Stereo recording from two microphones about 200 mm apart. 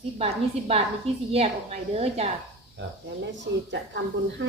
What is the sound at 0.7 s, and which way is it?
Speech, 30° right (ahead or behind).